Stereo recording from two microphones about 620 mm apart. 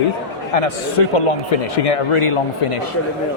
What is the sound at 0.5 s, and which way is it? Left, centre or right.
Speech, left.